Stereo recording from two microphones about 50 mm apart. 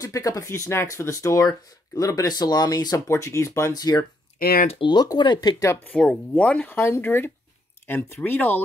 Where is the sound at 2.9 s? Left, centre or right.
Left.